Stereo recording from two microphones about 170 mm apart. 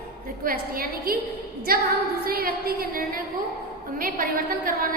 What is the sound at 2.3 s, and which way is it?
Speech, 65° right (ahead or behind).